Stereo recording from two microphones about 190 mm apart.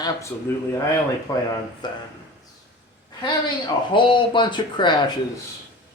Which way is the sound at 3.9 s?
25° left (ahead or behind).